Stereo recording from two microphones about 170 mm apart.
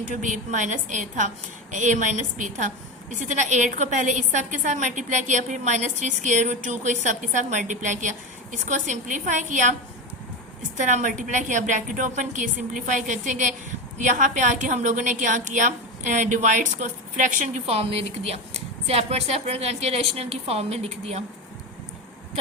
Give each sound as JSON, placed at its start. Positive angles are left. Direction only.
{"t": 0.0, "sound": "a woman's voice", "side_deg": -50}
{"t": 10.8, "sound": "a woman's voice", "side_deg": -45}